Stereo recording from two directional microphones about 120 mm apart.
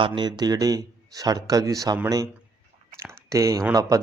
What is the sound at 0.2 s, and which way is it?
Speech, 35° right (ahead or behind).